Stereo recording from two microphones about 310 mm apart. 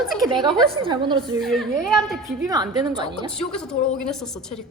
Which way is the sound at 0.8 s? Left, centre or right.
Centre.